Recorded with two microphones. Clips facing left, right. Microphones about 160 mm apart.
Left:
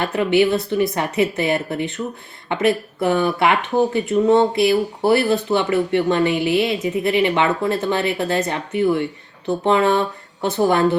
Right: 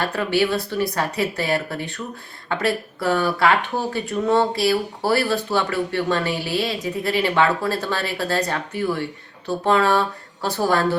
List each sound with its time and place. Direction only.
0.0 s speech: 20° left (ahead or behind)